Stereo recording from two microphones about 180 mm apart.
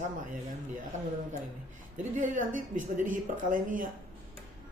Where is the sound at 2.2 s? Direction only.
45° right (ahead or behind).